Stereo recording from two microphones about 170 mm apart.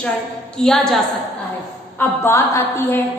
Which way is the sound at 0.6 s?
5° left (ahead or behind).